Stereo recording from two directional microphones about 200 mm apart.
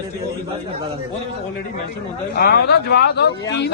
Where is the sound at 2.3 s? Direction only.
55° left (ahead or behind).